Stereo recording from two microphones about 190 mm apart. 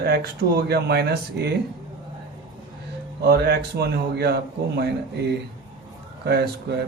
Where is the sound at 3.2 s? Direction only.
60° right (ahead or behind).